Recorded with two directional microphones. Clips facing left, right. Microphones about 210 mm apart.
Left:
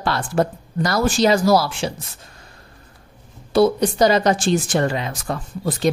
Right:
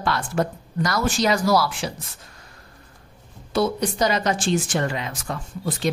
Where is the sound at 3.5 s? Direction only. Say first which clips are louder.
Left 6 dB; 35° left (ahead or behind).